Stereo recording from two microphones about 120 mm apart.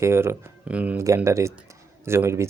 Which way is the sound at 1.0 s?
25° right (ahead or behind).